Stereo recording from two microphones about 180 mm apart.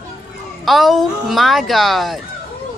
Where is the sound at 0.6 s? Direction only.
Centre (ahead or behind).